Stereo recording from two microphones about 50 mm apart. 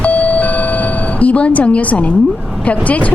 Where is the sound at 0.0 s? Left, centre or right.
Left.